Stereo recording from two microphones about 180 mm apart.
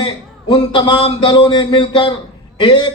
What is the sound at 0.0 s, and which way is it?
A man's voice, 25° left (ahead or behind).